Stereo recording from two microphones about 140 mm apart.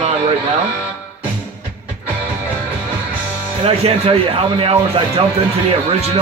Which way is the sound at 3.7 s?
45° right (ahead or behind).